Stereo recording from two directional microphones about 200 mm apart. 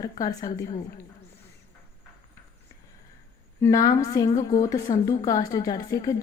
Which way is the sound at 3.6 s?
15° left (ahead or behind).